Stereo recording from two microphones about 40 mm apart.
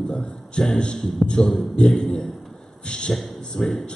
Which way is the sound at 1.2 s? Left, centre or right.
Centre.